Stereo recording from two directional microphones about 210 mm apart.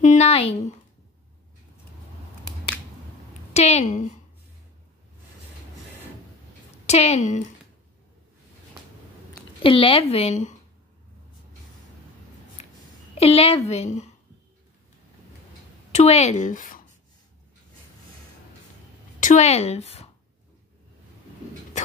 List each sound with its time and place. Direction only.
0.0 s a sound: 35° left (ahead or behind)
3.5 s a woman's voice: 30° left (ahead or behind)
6.9 s a woman's voice: 30° left (ahead or behind)
9.6 s speech: 25° left (ahead or behind)
12.6 s a sound: 30° left (ahead or behind)
13.2 s a woman's voice: 30° left (ahead or behind)
15.9 s a woman's voice: 30° left (ahead or behind)
19.1 s speech: 35° left (ahead or behind)